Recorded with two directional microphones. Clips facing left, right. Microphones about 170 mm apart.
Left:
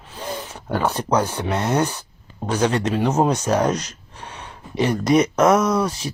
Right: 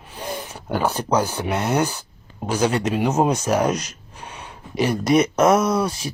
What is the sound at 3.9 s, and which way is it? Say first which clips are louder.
Gasp: even; 10° right (ahead or behind).